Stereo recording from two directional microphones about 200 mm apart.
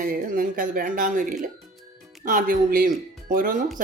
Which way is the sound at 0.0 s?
45° right (ahead or behind).